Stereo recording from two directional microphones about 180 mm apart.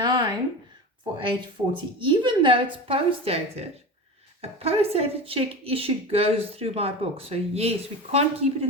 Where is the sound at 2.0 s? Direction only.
25° right (ahead or behind).